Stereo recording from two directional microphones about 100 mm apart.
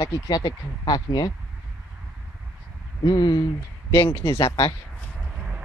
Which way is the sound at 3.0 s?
50° left (ahead or behind).